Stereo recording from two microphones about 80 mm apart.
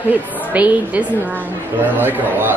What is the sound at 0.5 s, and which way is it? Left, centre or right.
Speech, centre.